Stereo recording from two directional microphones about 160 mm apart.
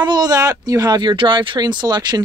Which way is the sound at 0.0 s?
25° right (ahead or behind).